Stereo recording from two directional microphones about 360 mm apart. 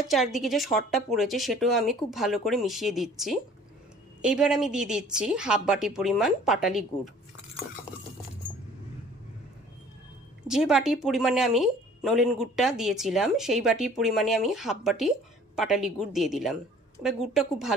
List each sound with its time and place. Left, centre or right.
0.1 s speech: centre
10.4 s speech: centre